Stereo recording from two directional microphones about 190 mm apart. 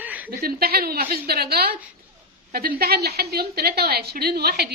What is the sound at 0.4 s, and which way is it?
A woman's voice, 55° right (ahead or behind).